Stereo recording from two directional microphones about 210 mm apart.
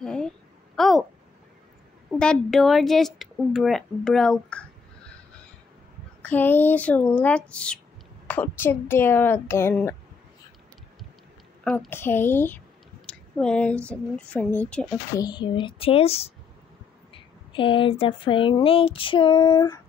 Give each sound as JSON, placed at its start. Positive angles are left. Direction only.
{"t": 0.0, "sound": "a sound", "side_deg": 5}
{"t": 2.0, "sound": "speech", "side_deg": 0}
{"t": 6.2, "sound": "a woman's voice", "side_deg": 10}
{"t": 11.6, "sound": "a woman's voice", "side_deg": 5}
{"t": 15.1, "sound": "speech", "side_deg": 20}